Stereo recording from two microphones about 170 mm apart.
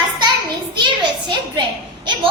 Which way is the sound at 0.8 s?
30° right (ahead or behind).